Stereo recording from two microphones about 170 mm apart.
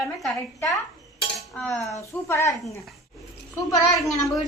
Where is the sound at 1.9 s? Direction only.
15° left (ahead or behind).